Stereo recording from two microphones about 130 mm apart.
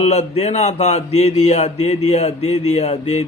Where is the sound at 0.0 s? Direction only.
55° left (ahead or behind).